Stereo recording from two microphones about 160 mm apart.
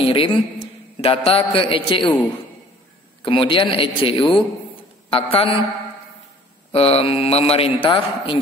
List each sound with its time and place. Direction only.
0.0 s a man's voice: 35° left (ahead or behind)
3.2 s a man's voice: 35° left (ahead or behind)
6.7 s a man's voice: 40° left (ahead or behind)